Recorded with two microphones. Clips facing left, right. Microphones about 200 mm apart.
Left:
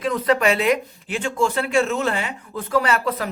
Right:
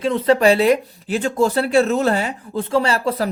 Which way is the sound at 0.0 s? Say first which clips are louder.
Right 4 dB; 30° right (ahead or behind).